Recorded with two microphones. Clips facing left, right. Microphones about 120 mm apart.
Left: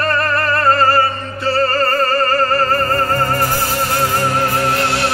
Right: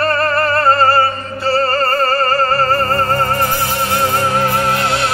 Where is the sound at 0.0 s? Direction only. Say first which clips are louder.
Right 2 dB; 35° right (ahead or behind).